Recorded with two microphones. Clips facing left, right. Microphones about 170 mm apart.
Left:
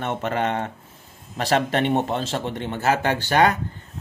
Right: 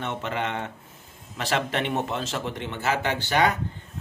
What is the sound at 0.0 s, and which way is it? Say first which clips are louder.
Speech: left 5 dB; 45° left (ahead or behind).